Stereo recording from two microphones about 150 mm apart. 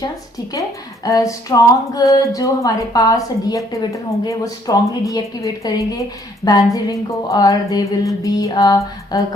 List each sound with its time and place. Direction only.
0.0 s speech: 20° left (ahead or behind)